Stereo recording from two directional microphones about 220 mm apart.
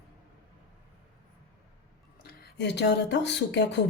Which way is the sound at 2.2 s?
45° left (ahead or behind).